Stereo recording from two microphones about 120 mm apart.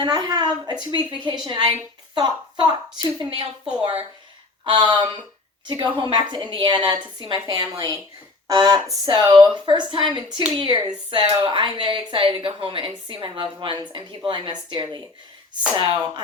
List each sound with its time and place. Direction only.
0.0 s a woman's voice: 35° right (ahead or behind)
4.7 s a woman's voice: 40° right (ahead or behind)